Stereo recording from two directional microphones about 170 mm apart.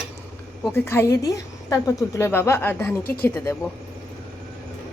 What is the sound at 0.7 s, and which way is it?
A woman's voice, 15° left (ahead or behind).